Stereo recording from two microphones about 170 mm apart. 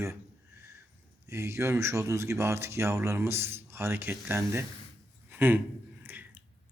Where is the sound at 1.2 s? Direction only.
15° right (ahead or behind).